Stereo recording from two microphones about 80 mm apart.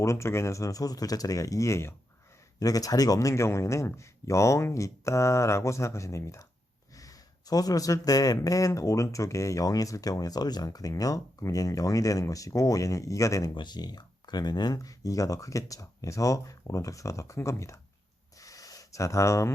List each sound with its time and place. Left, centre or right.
0.0 s speech: left
2.6 s speech: left
13.5 s speech: left
18.3 s a sound: left